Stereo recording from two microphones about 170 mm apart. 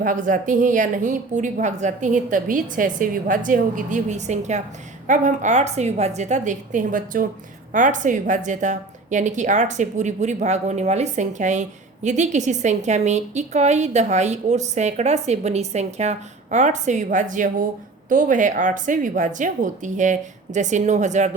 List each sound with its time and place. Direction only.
0.0 s a woman's voice: 50° right (ahead or behind)